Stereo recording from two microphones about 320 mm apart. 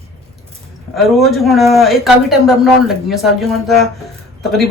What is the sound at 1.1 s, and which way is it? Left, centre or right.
Speech, centre.